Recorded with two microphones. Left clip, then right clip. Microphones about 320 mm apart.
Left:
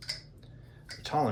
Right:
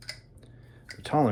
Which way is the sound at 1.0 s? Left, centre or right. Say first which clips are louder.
Right 4 dB; right.